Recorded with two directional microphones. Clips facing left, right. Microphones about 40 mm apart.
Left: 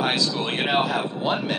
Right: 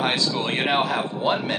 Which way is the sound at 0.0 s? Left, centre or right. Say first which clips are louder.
Even; right.